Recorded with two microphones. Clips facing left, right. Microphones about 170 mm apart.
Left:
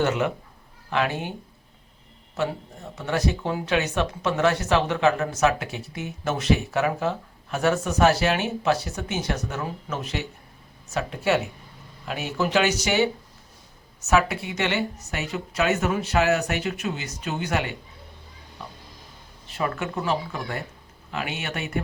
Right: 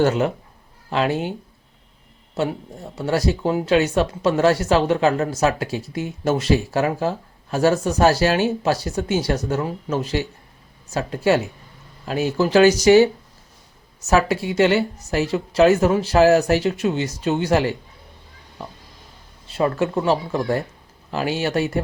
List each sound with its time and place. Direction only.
0.0 s speech: 35° right (ahead or behind)
3.1 s speech: 30° right (ahead or behind)
14.1 s speech: 35° right (ahead or behind)
19.5 s speech: 30° right (ahead or behind)